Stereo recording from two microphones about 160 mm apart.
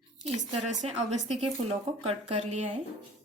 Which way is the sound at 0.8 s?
45° right (ahead or behind).